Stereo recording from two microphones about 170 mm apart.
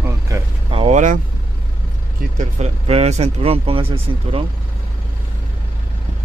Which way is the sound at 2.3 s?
40° right (ahead or behind).